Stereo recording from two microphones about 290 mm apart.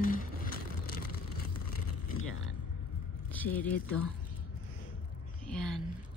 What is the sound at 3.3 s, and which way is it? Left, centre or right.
Speech, centre.